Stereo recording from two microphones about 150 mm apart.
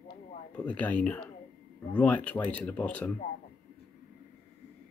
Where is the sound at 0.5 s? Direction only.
10° left (ahead or behind).